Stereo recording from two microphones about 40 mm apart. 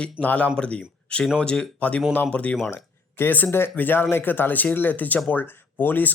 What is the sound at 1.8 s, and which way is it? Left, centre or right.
Speech, left.